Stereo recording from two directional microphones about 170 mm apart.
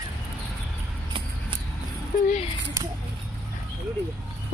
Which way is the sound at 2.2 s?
45° left (ahead or behind).